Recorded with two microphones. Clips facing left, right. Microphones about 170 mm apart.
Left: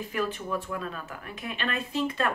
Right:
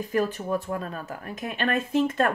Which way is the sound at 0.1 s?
45° right (ahead or behind).